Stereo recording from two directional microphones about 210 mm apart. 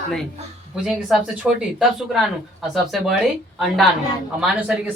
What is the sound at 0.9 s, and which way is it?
A woman's voice, centre (ahead or behind).